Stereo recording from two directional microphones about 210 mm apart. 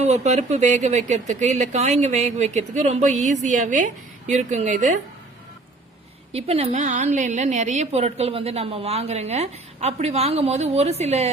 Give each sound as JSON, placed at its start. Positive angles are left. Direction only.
{"t": 0.0, "sound": "a woman's voice", "side_deg": -30}
{"t": 6.3, "sound": "a woman's voice", "side_deg": -30}